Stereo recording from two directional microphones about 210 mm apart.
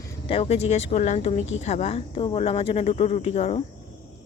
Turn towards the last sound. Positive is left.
turn(degrees=30)  # may be behind; listen again after turning